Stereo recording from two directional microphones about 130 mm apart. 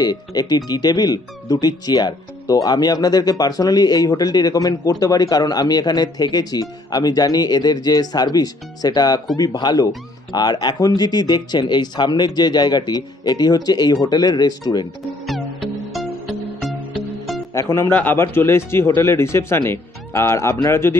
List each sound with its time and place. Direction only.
0.0 s speech: 30° left (ahead or behind)
15.2 s music: centre (ahead or behind)
17.6 s speech: 20° left (ahead or behind)